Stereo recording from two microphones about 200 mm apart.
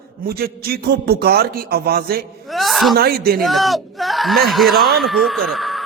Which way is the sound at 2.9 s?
50° right (ahead or behind).